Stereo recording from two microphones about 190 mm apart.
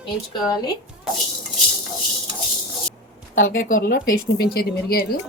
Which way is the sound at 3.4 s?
90° left.